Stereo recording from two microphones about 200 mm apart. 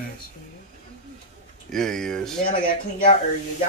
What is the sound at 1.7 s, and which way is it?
Speech, 5° left (ahead or behind).